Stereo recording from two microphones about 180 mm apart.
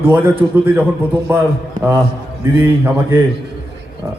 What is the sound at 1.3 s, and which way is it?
A man's voice, 10° right (ahead or behind).